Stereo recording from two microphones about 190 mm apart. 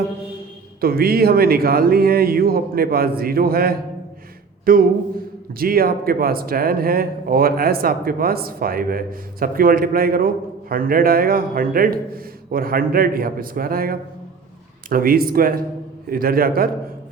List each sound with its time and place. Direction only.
0.8 s speech: 50° right (ahead or behind)
4.6 s a sound: 50° right (ahead or behind)
5.5 s speech: 50° right (ahead or behind)